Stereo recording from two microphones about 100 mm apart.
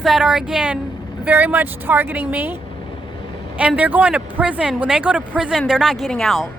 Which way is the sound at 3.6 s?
15° right (ahead or behind).